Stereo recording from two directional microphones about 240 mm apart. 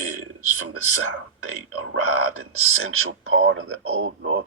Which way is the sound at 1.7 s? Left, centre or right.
Right.